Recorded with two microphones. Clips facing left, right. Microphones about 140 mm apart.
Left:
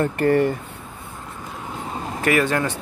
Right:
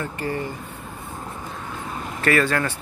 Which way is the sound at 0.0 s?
60° left (ahead or behind).